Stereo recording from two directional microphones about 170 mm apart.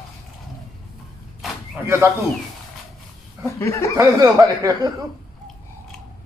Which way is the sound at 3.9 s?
20° right (ahead or behind).